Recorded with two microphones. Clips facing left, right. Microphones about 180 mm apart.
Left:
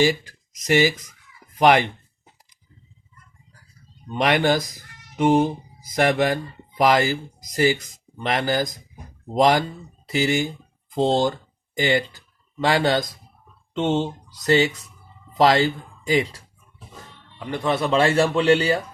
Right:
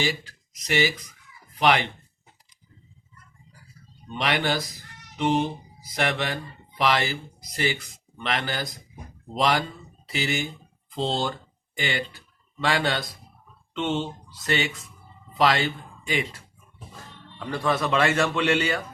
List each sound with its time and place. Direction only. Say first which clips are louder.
1.5 s speech: left 5 dB; 45° left (ahead or behind)
4.1 s a man's voice: left 6 dB; 45° left (ahead or behind)
17.4 s a man's voice: left 2 dB; 20° left (ahead or behind)